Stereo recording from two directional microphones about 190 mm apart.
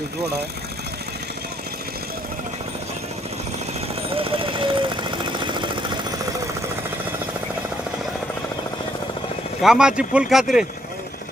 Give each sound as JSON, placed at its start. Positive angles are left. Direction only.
{"t": 4.1, "sound": "jackhammer", "side_deg": -30}
{"t": 9.6, "sound": "speech", "side_deg": -5}